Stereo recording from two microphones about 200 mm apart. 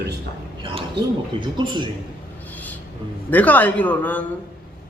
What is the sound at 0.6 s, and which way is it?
A man's voice, 25° right (ahead or behind).